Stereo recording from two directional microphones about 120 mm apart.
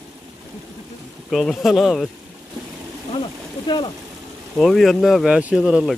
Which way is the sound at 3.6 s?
40° left (ahead or behind).